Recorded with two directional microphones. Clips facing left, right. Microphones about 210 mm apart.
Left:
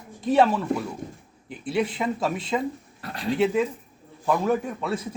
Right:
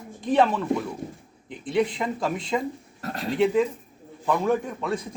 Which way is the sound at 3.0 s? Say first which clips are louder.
Even; 45° right (ahead or behind).